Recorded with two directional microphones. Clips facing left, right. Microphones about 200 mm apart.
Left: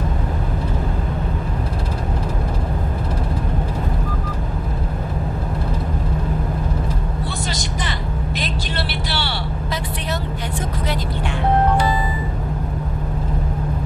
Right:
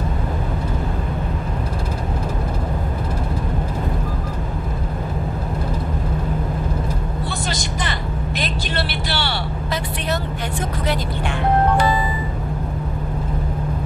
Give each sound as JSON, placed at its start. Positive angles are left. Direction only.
{"t": 7.8, "sound": "vehicle", "side_deg": -55}